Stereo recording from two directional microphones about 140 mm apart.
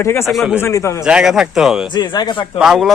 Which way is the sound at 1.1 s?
5° right (ahead or behind).